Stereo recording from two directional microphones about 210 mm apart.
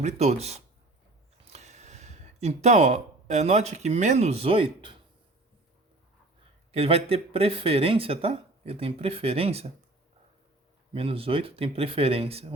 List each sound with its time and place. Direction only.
0.0 s speech: 30° right (ahead or behind)
6.7 s speech: 30° right (ahead or behind)
10.9 s speech: 25° right (ahead or behind)